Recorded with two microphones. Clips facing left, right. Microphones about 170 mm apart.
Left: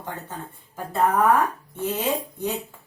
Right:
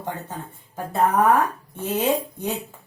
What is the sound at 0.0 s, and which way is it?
Speech, 15° right (ahead or behind).